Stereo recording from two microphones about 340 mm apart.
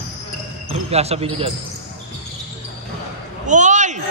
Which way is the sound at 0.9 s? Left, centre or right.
Centre.